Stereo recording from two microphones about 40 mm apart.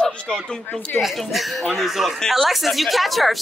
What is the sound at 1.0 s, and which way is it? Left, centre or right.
Speech, centre.